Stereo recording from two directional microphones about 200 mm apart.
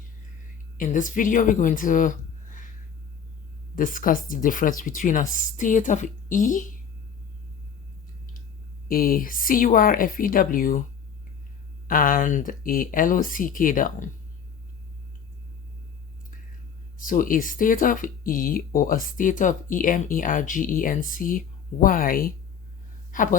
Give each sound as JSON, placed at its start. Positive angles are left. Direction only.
{"t": 0.8, "sound": "speech", "side_deg": 40}
{"t": 3.8, "sound": "speech", "side_deg": 45}
{"t": 8.9, "sound": "speech", "side_deg": 45}
{"t": 11.9, "sound": "speech", "side_deg": 45}
{"t": 17.0, "sound": "a woman's voice", "side_deg": 45}